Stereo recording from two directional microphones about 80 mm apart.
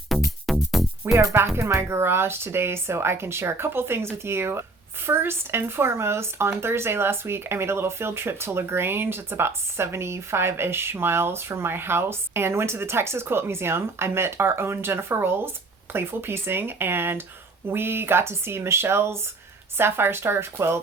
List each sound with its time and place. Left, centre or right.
0.1 s music: centre
1.0 s speech: right